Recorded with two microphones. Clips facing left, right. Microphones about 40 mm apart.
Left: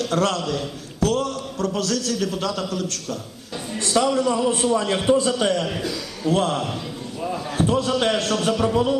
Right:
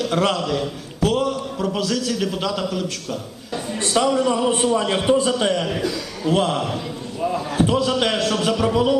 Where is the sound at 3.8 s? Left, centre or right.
Right.